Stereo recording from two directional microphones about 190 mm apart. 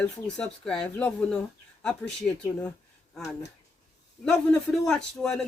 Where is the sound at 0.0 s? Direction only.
5° left (ahead or behind).